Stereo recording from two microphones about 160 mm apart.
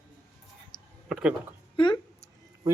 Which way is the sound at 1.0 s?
5° right (ahead or behind).